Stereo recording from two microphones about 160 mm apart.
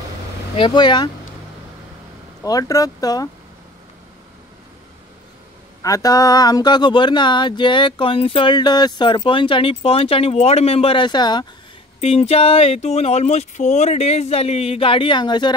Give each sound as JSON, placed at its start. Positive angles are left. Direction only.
{"t": 0.6, "sound": "speech", "side_deg": 30}
{"t": 2.4, "sound": "speech", "side_deg": 20}
{"t": 5.8, "sound": "speech", "side_deg": 20}
{"t": 12.0, "sound": "speech", "side_deg": 40}